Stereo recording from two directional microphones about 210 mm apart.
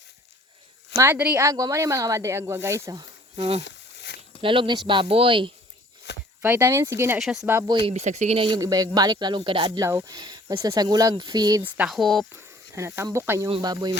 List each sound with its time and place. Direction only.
0.9 s speech: 10° right (ahead or behind); by 3.6 s 25° right (ahead or behind)
3.6 s a sound: 50° left (ahead or behind)
4.4 s speech: 25° right (ahead or behind)
6.1 s a sound: 55° left (ahead or behind)
6.4 s speech: 10° right (ahead or behind)
7.9 s speech: 30° right (ahead or behind)
11.6 s speech: 5° right (ahead or behind)
12.3 s speech: 15° right (ahead or behind)